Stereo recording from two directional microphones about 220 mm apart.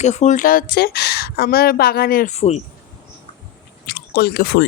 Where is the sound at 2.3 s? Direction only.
30° left (ahead or behind).